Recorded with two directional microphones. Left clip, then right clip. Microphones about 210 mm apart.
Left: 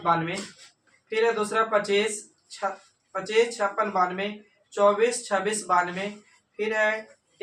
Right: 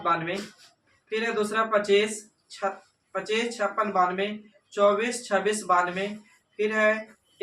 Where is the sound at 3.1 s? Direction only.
15° right (ahead or behind).